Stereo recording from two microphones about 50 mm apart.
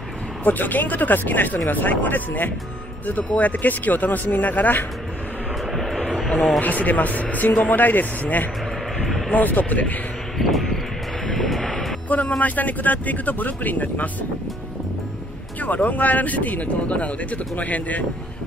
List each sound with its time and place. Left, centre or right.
0.4 s speech: left
5.7 s vehicle: centre
6.1 s speech: centre
6.6 s speech: left
10.3 s a sound: centre
11.2 s vehicle: centre
12.1 s speech: left
15.6 s speech: left